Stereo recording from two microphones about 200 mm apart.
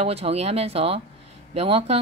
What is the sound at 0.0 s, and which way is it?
A woman's voice, 30° right (ahead or behind).